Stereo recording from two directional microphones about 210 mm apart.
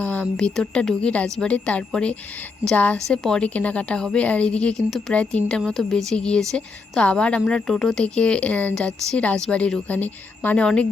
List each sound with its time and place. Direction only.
0.0 s a woman's voice: 5° left (ahead or behind)